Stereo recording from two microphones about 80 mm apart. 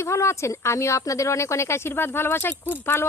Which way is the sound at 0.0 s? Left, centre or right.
Left.